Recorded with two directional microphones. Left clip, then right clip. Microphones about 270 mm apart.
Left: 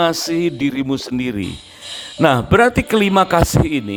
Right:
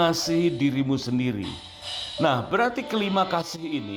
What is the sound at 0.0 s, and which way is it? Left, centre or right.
Speech, left.